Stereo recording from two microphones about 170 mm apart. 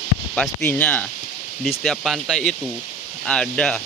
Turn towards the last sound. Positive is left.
turn(degrees=5)  # may be behind; listen again after turning